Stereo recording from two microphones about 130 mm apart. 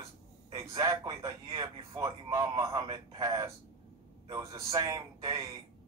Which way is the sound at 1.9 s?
25° right (ahead or behind).